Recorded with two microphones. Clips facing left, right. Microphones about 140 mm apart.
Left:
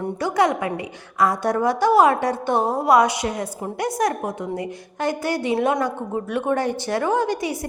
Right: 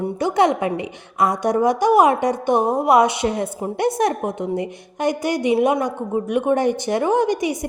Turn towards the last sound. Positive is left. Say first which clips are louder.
# right 3 dB
turn(degrees=-20)  # may be behind; listen again after turning